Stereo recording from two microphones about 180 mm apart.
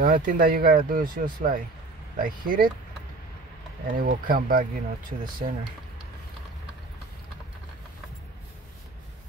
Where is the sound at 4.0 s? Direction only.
50° right (ahead or behind).